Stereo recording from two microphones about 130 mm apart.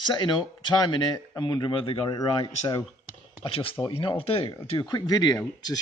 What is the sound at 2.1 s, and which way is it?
Speech, 25° left (ahead or behind).